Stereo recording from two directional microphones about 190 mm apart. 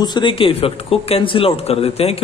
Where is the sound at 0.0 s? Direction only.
25° left (ahead or behind).